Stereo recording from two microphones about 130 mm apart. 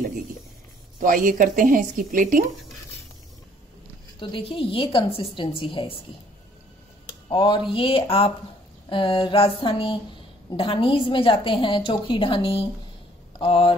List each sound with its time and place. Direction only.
0.9 s a woman's voice: 90° right
4.2 s speech: 40° left (ahead or behind)
7.2 s speech: 35° left (ahead or behind)